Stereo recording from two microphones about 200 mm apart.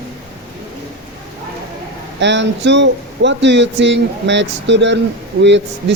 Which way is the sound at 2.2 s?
65° right (ahead or behind).